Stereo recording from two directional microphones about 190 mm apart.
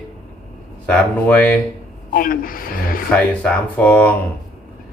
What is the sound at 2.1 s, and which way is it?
Speech, 50° left (ahead or behind).